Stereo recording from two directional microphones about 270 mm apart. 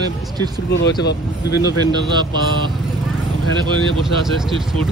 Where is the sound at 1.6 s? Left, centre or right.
Centre.